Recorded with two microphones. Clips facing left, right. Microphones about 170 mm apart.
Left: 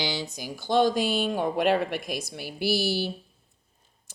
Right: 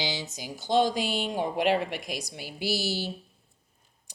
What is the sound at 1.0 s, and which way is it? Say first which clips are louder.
Speech: left 4 dB; 15° right (ahead or behind).